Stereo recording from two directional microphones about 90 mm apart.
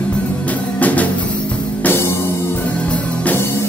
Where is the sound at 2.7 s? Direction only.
15° left (ahead or behind).